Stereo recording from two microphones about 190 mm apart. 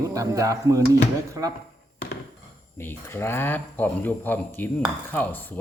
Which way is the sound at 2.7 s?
10° left (ahead or behind).